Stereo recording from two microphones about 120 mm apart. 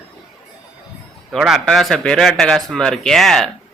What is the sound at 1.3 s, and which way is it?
Speech, 5° right (ahead or behind).